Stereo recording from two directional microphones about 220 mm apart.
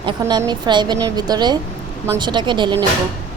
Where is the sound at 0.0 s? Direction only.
20° right (ahead or behind).